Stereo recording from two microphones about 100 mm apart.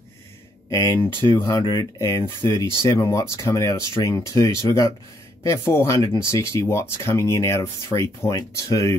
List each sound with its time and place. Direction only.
0.7 s speech: 35° left (ahead or behind)
2.0 s speech: 30° left (ahead or behind)
2.4 s speech: 45° right (ahead or behind)
2.9 s speech: 30° left (ahead or behind)